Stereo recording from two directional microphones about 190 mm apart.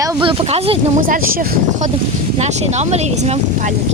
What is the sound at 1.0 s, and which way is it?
Speech, 45° right (ahead or behind).